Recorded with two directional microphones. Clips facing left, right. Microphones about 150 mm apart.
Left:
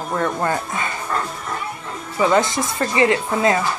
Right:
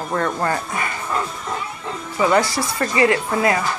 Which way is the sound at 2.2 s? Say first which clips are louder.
Even; 20° left (ahead or behind).